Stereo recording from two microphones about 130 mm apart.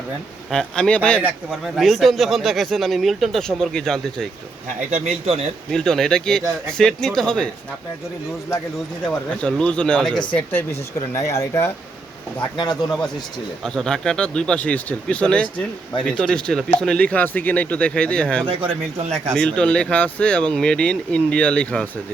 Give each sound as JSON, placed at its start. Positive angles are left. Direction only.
{"t": 0.5, "sound": "speech", "side_deg": 5}
{"t": 1.2, "sound": "speech", "side_deg": 0}
{"t": 4.9, "sound": "speech", "side_deg": -65}
{"t": 5.7, "sound": "speech", "side_deg": 5}
{"t": 9.4, "sound": "speech", "side_deg": 5}
{"t": 10.3, "sound": "speech", "side_deg": 20}
{"t": 12.4, "sound": "speech", "side_deg": 35}
{"t": 13.7, "sound": "speech", "side_deg": 5}